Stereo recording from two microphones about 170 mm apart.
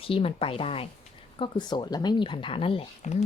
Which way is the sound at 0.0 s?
35° left (ahead or behind).